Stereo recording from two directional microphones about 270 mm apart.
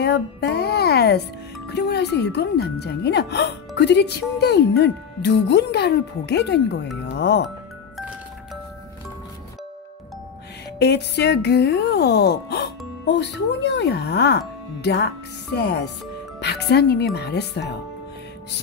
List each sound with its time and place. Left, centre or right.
0.0 s speech: left
10.8 s speech: left